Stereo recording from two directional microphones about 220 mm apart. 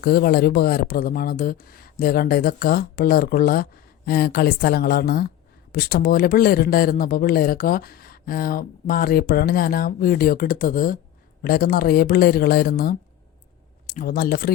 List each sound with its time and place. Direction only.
0.0 s speech: 45° left (ahead or behind)